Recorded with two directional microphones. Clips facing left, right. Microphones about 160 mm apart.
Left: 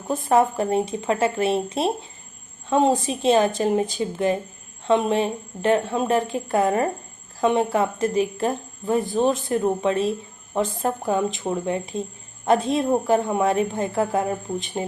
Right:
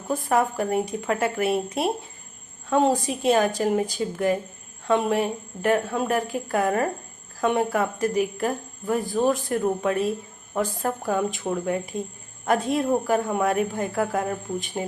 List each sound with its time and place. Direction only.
0.1 s speech: 25° left (ahead or behind)